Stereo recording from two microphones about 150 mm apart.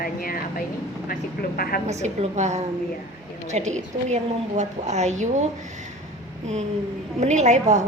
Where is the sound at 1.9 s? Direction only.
50° right (ahead or behind).